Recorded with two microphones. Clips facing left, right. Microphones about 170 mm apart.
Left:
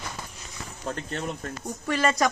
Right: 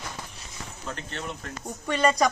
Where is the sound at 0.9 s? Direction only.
40° left (ahead or behind).